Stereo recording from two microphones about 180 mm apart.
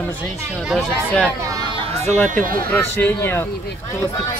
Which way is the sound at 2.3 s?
50° right (ahead or behind).